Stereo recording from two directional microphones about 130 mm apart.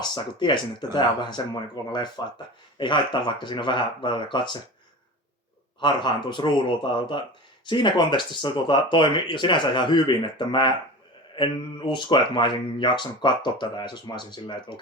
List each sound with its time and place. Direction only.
0.0 s speech: 35° left (ahead or behind)
5.8 s speech: 35° left (ahead or behind)